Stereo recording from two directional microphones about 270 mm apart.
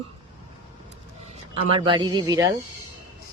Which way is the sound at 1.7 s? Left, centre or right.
Centre.